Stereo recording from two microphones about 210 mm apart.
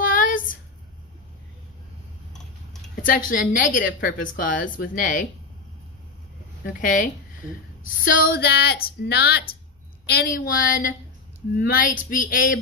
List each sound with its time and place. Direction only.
0.0 s a sound: 40° left (ahead or behind)
3.0 s a woman's voice: 40° left (ahead or behind)
6.6 s a woman's voice: 40° left (ahead or behind)
8.1 s a woman's voice: 45° left (ahead or behind)